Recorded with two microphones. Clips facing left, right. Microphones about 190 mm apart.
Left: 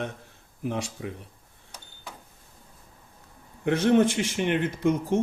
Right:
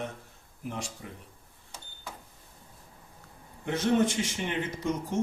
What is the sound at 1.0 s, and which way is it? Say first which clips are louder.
Speech: left 9 dB; 90° left.